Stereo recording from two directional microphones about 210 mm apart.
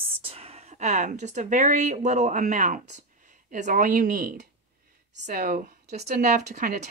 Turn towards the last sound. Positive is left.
turn(degrees=-40)  # may be behind; listen again after turning